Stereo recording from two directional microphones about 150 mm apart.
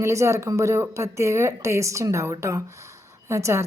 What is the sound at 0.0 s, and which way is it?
A woman's voice, 20° right (ahead or behind).